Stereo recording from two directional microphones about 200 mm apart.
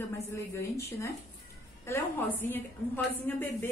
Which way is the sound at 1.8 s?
10° left (ahead or behind).